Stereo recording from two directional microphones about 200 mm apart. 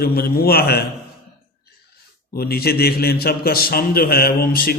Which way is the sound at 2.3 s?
50° left (ahead or behind).